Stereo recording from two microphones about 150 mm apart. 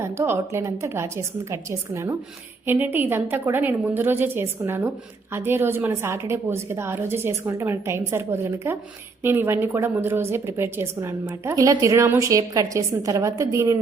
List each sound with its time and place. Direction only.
0.0 s a woman's voice: 15° right (ahead or behind)